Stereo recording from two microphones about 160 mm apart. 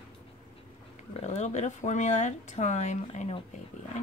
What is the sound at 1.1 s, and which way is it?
Speech, 40° left (ahead or behind).